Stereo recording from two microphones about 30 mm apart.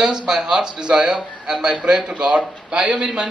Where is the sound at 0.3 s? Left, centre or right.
Right.